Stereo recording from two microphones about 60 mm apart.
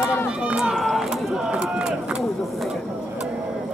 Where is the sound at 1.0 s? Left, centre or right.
Centre.